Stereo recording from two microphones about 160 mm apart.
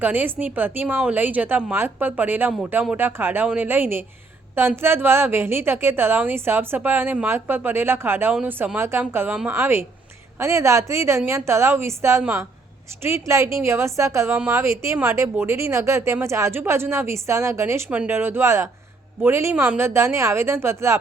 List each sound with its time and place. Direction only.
0.0 s a woman's voice: 10° right (ahead or behind)